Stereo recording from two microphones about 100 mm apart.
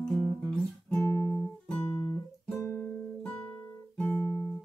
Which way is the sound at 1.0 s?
30° left (ahead or behind).